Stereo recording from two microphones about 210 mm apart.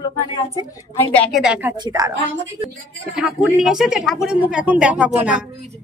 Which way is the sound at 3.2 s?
Centre (ahead or behind).